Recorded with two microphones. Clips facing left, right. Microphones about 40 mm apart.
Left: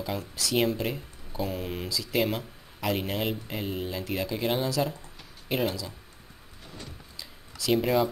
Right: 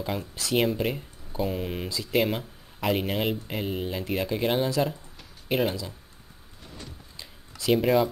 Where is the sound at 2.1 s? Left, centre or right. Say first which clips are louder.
Right 3 dB; centre.